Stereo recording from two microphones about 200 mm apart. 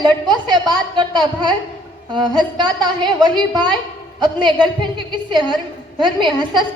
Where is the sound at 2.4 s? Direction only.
20° right (ahead or behind).